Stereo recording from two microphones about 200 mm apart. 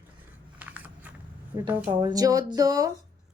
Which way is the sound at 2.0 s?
20° right (ahead or behind).